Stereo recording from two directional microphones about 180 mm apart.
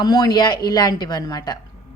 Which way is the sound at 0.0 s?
25° left (ahead or behind).